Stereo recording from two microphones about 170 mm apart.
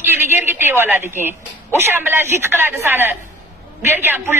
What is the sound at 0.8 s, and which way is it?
Speech, 15° right (ahead or behind).